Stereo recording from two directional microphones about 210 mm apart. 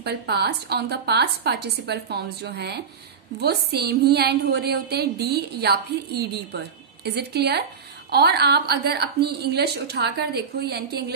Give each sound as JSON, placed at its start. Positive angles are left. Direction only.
{"t": 0.0, "sound": "a woman's voice", "side_deg": -50}